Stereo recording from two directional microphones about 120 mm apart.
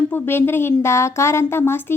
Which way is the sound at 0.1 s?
20° left (ahead or behind).